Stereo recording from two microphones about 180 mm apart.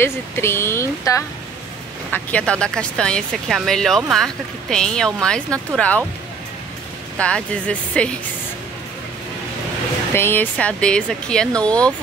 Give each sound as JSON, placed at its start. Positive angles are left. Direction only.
{"t": 0.0, "sound": "speech", "side_deg": 15}
{"t": 7.2, "sound": "speech", "side_deg": 5}
{"t": 10.1, "sound": "speech", "side_deg": 10}